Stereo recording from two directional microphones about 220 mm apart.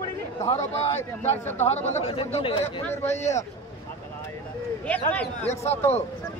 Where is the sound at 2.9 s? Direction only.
10° left (ahead or behind).